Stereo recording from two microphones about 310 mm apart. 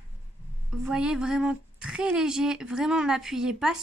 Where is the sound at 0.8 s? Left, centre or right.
Centre.